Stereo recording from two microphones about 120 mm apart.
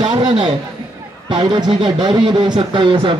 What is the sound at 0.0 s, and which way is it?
A man's voice, 40° right (ahead or behind).